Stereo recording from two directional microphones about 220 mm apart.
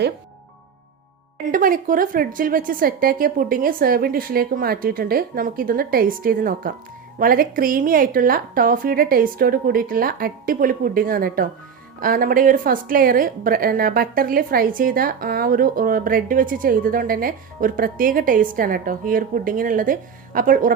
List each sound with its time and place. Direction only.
1.5 s a woman's voice: 40° right (ahead or behind)